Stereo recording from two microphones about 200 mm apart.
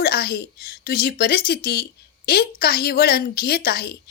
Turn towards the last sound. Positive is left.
turn(degrees=50)  # may be behind; listen again after turning